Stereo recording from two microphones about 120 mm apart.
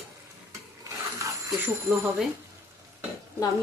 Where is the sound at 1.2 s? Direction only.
25° right (ahead or behind).